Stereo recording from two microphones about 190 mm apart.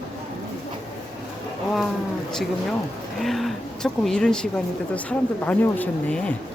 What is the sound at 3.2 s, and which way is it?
Vehicle, centre (ahead or behind).